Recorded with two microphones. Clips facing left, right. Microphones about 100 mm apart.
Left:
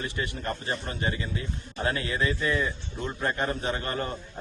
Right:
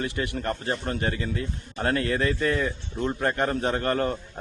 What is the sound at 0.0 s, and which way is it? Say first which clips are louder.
A man's voice: right 4 dB; 60° right (ahead or behind).